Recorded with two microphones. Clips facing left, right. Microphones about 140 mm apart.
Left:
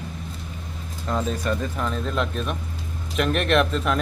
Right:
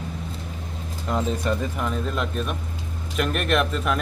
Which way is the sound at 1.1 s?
15° right (ahead or behind).